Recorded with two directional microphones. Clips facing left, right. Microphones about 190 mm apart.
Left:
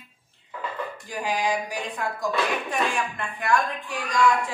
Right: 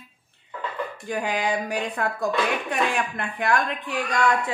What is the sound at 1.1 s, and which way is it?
Speech, 60° right (ahead or behind).